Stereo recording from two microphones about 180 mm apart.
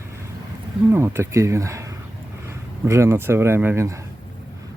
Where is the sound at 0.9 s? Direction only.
15° right (ahead or behind).